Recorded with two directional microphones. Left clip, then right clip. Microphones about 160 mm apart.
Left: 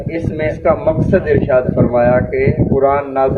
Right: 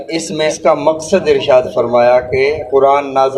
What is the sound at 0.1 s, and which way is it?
A man's voice, 40° right (ahead or behind).